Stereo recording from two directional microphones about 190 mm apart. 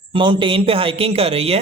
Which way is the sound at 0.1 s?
25° right (ahead or behind).